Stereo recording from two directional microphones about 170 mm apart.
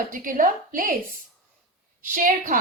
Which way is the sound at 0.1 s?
50° right (ahead or behind).